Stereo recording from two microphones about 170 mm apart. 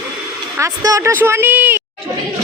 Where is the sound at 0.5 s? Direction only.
20° right (ahead or behind).